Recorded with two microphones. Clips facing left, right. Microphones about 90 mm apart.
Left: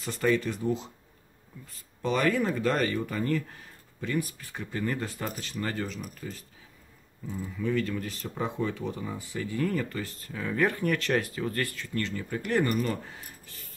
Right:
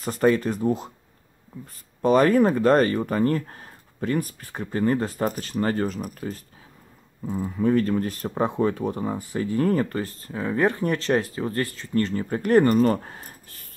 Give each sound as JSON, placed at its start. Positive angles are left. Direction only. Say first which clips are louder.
{"t": 0.0, "sound": "speech", "louder": "right 6 dB", "side_deg": -40}
{"t": 2.0, "sound": "speech", "louder": "right 9 dB", "side_deg": -40}
{"t": 7.4, "sound": "speech", "louder": "right 8 dB", "side_deg": -45}